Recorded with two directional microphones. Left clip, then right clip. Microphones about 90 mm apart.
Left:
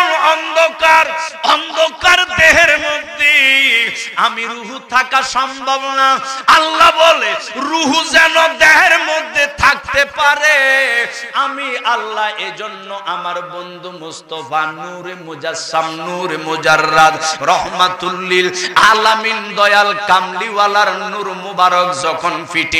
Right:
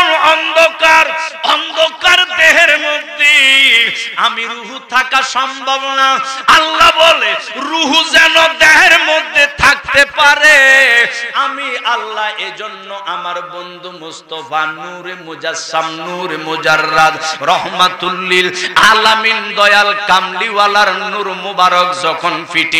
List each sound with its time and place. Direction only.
0.0 s music: 35° left (ahead or behind)
4.9 s a man's voice: 30° left (ahead or behind)
15.4 s a man's voice: 30° left (ahead or behind)